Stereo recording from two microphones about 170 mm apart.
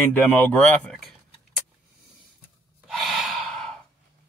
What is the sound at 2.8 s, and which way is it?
Gasp, centre (ahead or behind).